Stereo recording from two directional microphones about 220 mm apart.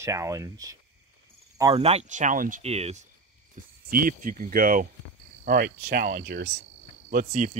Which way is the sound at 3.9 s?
40° right (ahead or behind).